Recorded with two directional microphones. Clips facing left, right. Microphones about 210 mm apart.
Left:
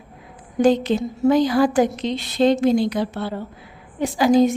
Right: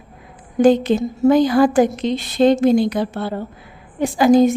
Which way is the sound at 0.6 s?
50° right (ahead or behind).